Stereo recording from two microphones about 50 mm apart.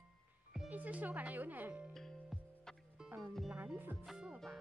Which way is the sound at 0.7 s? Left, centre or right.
Right.